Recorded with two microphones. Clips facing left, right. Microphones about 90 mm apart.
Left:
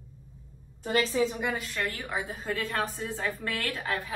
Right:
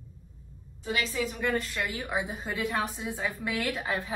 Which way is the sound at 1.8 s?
15° right (ahead or behind).